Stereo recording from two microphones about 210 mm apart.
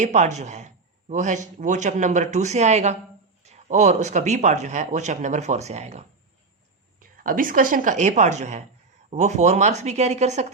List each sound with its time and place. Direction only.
0.0 s speech: 35° right (ahead or behind)